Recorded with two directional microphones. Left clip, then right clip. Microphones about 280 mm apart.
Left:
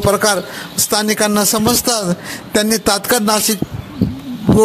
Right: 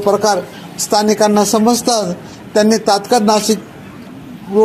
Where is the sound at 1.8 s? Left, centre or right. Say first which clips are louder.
Right 2 dB; left.